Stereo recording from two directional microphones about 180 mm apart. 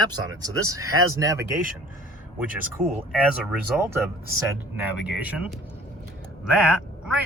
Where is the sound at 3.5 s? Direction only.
10° right (ahead or behind).